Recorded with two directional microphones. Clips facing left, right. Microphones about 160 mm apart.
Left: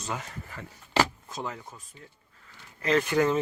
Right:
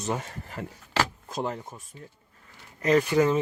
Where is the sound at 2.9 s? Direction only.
5° right (ahead or behind).